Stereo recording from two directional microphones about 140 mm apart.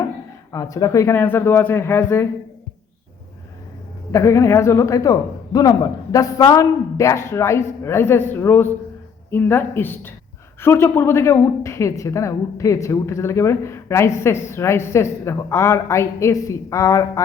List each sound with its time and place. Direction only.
0.5 s a man's voice: 25° left (ahead or behind)
4.1 s a woman's voice: 20° left (ahead or behind)